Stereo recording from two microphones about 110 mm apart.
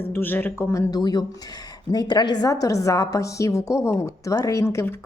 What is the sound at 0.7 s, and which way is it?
A woman's voice, 30° left (ahead or behind).